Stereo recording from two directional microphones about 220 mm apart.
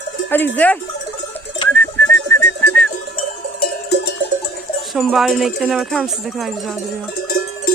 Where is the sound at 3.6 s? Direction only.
50° left (ahead or behind).